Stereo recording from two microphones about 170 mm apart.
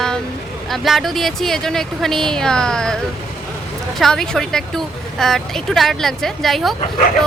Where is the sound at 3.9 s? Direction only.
5° left (ahead or behind).